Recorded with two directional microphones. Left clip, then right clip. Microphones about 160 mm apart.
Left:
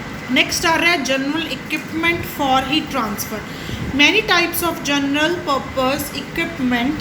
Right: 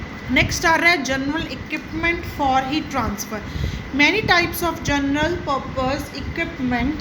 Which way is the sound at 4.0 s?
30° right (ahead or behind).